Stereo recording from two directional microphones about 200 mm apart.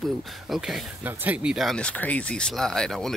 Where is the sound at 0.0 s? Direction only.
Centre (ahead or behind).